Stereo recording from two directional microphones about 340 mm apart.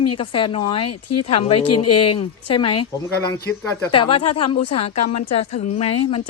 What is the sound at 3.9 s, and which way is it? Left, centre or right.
Speech, centre.